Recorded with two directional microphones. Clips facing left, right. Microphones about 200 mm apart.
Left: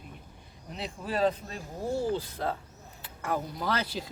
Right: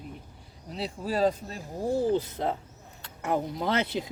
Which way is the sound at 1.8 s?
15° right (ahead or behind).